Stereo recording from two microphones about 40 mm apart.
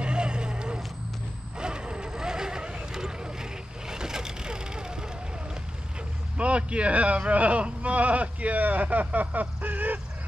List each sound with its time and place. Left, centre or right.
0.0 s vehicle: right
6.3 s speech: right